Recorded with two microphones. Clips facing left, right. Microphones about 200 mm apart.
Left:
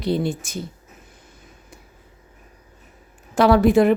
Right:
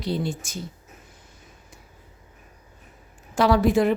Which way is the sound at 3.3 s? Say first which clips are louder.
Left 4 dB; 60° left (ahead or behind).